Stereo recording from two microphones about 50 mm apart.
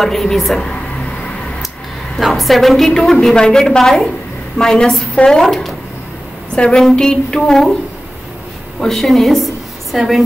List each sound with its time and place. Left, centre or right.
0.0 s a woman's voice: centre
2.1 s a woman's voice: centre
5.4 s a woman's voice: centre
6.5 s a woman's voice: centre
8.8 s a woman's voice: centre